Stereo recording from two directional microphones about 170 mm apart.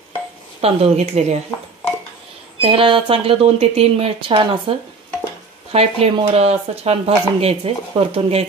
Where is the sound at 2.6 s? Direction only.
35° right (ahead or behind).